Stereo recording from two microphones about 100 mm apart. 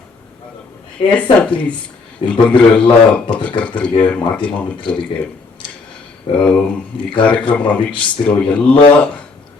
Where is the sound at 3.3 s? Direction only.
15° left (ahead or behind).